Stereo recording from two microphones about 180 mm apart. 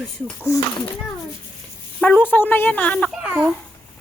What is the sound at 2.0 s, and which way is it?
A woman's voice, 10° left (ahead or behind).